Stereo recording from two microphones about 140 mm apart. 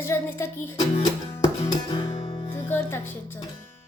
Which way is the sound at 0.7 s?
45° left (ahead or behind).